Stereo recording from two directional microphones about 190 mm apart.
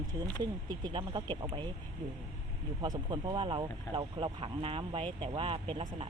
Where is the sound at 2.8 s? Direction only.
25° right (ahead or behind).